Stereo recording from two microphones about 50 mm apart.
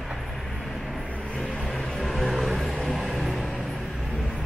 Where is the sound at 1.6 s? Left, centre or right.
Centre.